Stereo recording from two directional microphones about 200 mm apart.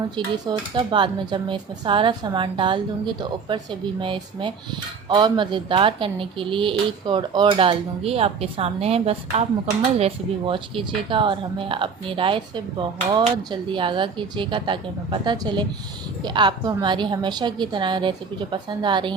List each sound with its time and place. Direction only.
0.4 s speech: 25° right (ahead or behind)